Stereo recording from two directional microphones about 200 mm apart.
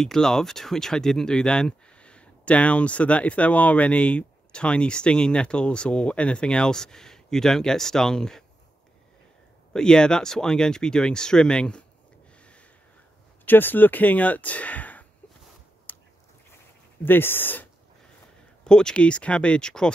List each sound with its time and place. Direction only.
0.0 s speech: 5° left (ahead or behind)
9.7 s speech: 5° left (ahead or behind)
13.5 s speech: 10° left (ahead or behind)
15.9 s a sound: 10° left (ahead or behind)
17.0 s speech: 10° left (ahead or behind)